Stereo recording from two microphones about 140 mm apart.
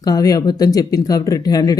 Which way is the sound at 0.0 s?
25° left (ahead or behind).